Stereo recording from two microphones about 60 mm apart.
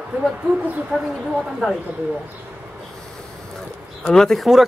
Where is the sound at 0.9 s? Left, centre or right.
Centre.